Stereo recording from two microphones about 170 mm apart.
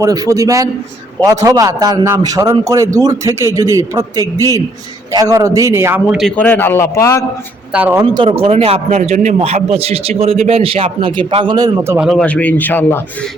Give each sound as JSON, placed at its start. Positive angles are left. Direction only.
{"t": 0.0, "sound": "a man's voice", "side_deg": -20}
{"t": 6.1, "sound": "a man's voice", "side_deg": 5}
{"t": 7.7, "sound": "a man's voice", "side_deg": -10}
{"t": 8.0, "sound": "a man's voice", "side_deg": -30}
{"t": 12.0, "sound": "a man's voice", "side_deg": 5}